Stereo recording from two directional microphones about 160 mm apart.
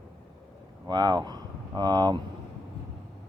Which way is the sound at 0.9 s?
25° right (ahead or behind).